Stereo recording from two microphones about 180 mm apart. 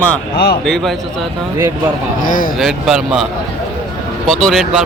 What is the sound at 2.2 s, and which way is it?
Speech, 50° left (ahead or behind).